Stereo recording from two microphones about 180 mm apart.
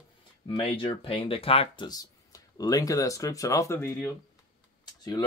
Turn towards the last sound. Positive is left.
turn(degrees=20)  # may be behind; listen again after turning